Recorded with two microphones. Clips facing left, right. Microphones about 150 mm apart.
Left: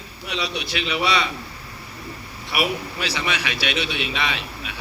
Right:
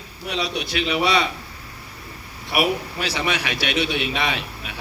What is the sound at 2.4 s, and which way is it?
A man's voice, 50° right (ahead or behind).